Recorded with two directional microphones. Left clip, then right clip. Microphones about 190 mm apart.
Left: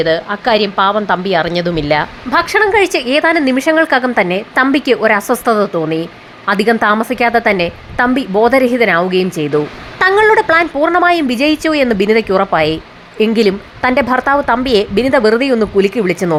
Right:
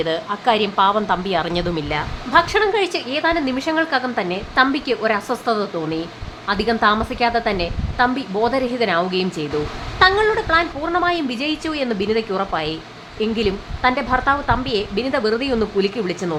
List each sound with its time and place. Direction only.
0.0 s a woman's voice: 20° left (ahead or behind)
10.0 s a woman's voice: 35° left (ahead or behind)